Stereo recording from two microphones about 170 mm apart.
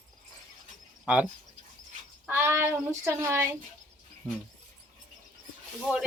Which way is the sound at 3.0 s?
15° right (ahead or behind).